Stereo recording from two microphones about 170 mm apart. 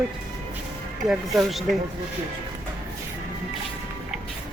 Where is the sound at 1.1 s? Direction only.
Centre (ahead or behind).